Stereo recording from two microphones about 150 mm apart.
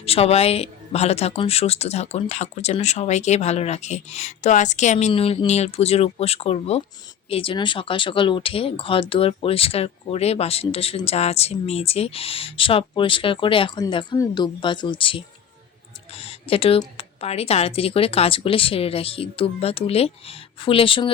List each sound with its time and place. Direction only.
0.0 s speech: 40° left (ahead or behind)